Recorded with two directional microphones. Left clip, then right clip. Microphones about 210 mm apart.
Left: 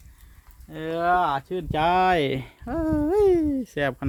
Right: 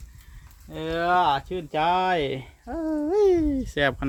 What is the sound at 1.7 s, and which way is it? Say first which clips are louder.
Speech: left 2 dB; 55° left (ahead or behind).